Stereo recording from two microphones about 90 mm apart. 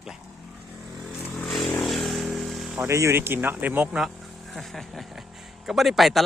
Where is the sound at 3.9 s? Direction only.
Centre (ahead or behind).